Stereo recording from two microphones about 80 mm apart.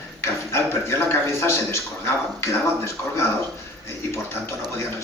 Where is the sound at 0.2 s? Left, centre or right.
Left.